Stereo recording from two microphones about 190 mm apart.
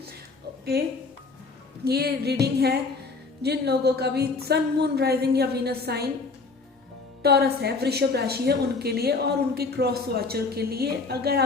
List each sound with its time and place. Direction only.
0.6 s a woman's voice: 55° right (ahead or behind)
7.2 s a woman's voice: 60° right (ahead or behind)